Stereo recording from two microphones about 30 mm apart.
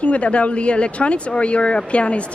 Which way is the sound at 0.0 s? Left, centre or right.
Left.